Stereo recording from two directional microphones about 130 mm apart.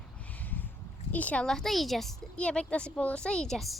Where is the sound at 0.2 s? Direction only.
10° left (ahead or behind).